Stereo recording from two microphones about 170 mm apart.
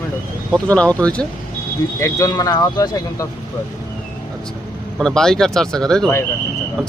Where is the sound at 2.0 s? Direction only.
20° left (ahead or behind).